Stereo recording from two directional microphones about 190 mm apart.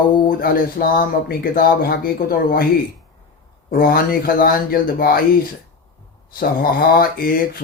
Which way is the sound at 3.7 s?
50° left (ahead or behind).